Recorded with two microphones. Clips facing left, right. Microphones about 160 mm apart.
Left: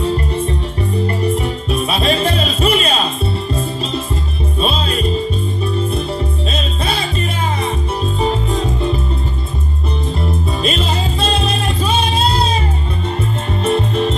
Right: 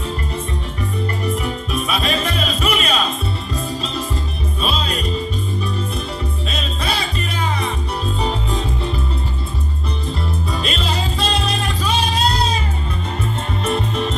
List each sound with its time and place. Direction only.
1.0 s music: 30° left (ahead or behind)
4.6 s music: 25° left (ahead or behind)
6.5 s music: 25° left (ahead or behind)
10.6 s music: 25° left (ahead or behind)
13.7 s music: 30° left (ahead or behind)